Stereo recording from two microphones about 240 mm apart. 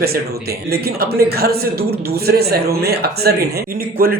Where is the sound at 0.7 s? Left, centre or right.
Right.